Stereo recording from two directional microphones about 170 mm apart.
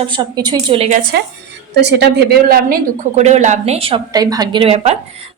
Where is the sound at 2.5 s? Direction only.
60° right (ahead or behind).